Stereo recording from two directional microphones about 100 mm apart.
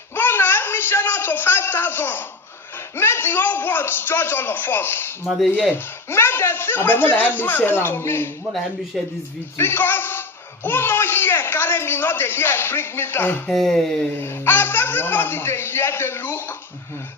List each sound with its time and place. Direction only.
0.2 s a sound: 25° left (ahead or behind)
2.9 s a man's voice: 25° left (ahead or behind)
9.6 s a man's voice: 25° left (ahead or behind)
13.5 s speech: centre (ahead or behind)
14.2 s a man's voice: 25° left (ahead or behind)